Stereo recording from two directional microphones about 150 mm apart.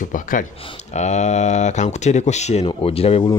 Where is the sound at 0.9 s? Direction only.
50° left (ahead or behind).